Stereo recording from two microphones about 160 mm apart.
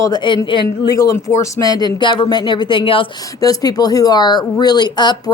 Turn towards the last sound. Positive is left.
turn(degrees=25)  # may be behind; listen again after turning